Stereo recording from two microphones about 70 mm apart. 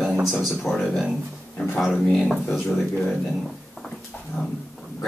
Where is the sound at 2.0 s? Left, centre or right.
Centre.